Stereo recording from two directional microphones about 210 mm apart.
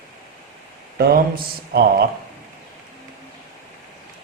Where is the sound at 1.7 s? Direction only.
50° right (ahead or behind).